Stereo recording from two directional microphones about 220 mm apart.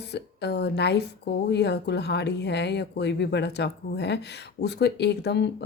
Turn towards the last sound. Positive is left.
turn(degrees=50)  # may be behind; listen again after turning